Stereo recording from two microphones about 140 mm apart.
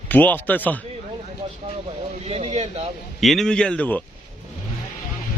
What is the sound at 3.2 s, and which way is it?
Speech, centre (ahead or behind).